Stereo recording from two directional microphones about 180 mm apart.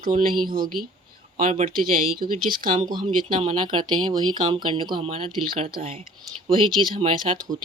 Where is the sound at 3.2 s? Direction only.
30° right (ahead or behind).